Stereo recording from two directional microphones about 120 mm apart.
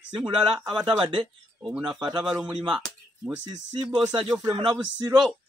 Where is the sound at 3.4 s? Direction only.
40° right (ahead or behind).